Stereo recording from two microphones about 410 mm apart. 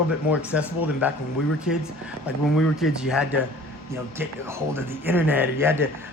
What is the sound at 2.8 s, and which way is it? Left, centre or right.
Speech, centre.